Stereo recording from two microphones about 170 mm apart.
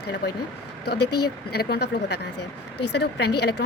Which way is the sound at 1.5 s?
70° left (ahead or behind).